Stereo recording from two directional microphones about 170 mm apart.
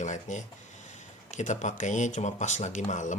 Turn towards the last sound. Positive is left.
turn(degrees=45)  # may be behind; listen again after turning